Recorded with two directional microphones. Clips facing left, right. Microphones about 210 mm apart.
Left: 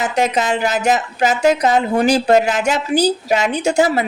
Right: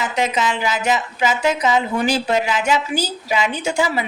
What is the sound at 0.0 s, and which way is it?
Speech, 40° left (ahead or behind).